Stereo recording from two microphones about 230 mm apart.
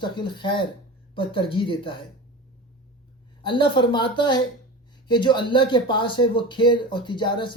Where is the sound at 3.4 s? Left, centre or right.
Left.